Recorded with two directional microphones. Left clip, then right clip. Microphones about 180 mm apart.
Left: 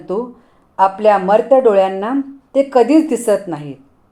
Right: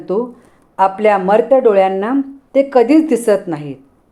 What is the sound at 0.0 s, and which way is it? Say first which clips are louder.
A woman's voice: right 3 dB; 15° right (ahead or behind).